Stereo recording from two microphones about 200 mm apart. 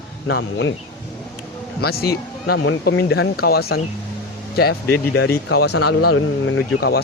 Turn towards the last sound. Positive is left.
turn(degrees=50)  # may be behind; listen again after turning